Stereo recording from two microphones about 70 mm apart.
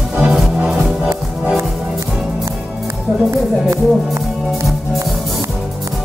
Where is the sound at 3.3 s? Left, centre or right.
Right.